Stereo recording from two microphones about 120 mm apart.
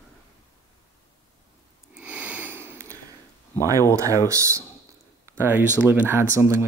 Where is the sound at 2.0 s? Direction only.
10° right (ahead or behind).